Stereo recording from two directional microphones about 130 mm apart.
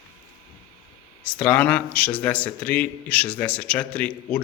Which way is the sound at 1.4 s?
10° left (ahead or behind).